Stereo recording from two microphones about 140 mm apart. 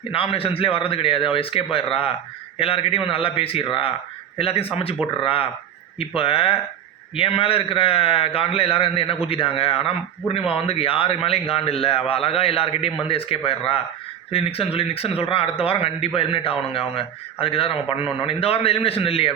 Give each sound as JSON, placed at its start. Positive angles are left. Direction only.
{"t": 0.1, "sound": "a man's voice", "side_deg": 40}